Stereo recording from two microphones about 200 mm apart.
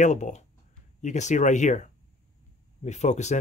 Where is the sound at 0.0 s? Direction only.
35° left (ahead or behind).